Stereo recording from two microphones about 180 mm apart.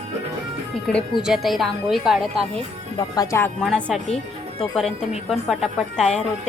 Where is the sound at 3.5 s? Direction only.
5° left (ahead or behind).